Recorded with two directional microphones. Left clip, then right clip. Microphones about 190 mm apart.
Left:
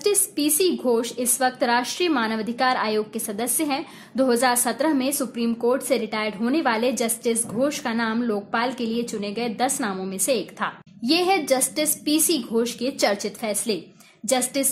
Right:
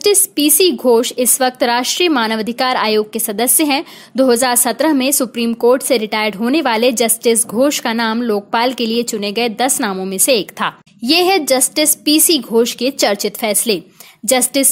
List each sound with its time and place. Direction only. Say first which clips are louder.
0.0 s a woman's voice: right 9 dB; 40° right (ahead or behind)